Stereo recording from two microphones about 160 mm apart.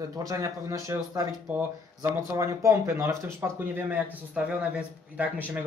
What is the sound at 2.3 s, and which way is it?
Speech, 20° right (ahead or behind).